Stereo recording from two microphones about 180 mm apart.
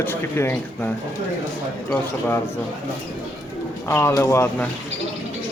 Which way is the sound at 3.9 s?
15° left (ahead or behind).